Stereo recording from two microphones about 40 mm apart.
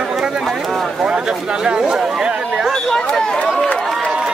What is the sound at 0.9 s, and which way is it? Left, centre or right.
Chatter, right.